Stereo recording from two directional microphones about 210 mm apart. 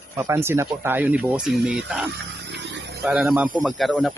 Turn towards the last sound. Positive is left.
turn(degrees=0)  # may be behind; listen again after turning